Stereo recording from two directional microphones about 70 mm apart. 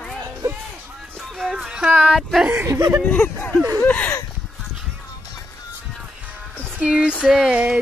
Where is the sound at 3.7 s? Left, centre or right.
Left.